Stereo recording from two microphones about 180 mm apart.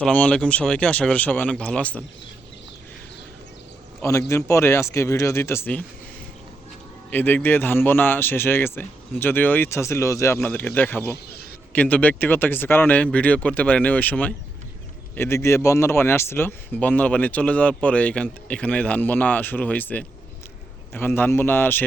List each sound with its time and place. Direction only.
0.0 s speech: 5° left (ahead or behind)
4.3 s speech: 15° left (ahead or behind)
7.1 s speech: 10° left (ahead or behind)